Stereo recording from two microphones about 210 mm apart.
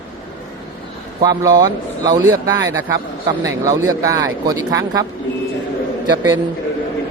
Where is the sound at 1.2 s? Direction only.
20° right (ahead or behind).